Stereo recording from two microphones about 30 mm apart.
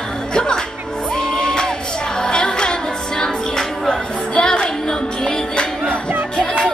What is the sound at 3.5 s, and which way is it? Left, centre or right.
Music, centre.